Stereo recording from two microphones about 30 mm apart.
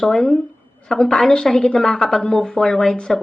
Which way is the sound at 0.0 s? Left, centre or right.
Centre.